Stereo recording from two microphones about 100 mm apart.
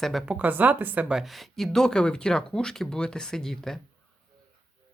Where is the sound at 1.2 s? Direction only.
Centre (ahead or behind).